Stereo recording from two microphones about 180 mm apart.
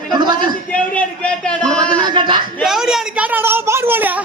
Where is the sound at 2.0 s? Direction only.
25° right (ahead or behind).